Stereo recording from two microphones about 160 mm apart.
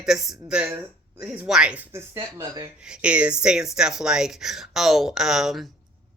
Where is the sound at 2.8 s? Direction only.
5° right (ahead or behind).